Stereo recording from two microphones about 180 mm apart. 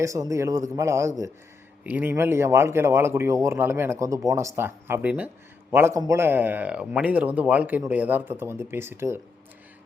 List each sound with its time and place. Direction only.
0.0 s speech: 15° right (ahead or behind)